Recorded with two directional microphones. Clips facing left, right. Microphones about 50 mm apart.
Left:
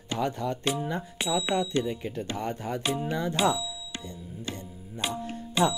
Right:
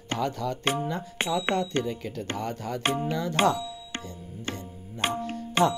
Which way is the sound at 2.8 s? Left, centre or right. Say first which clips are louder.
Right 3 dB; right.